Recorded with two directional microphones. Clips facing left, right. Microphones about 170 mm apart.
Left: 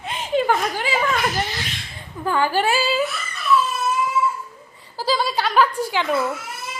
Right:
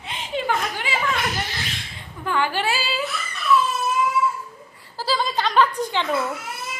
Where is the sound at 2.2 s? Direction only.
40° left (ahead or behind).